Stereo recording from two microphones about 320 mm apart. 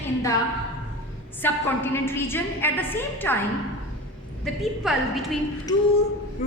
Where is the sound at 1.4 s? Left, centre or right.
Centre.